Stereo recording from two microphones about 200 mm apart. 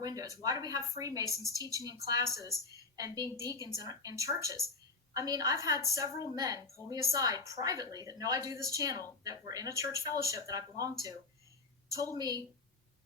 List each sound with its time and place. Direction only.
0.0 s a woman's voice: 20° right (ahead or behind)
11.9 s a woman's voice: 20° right (ahead or behind)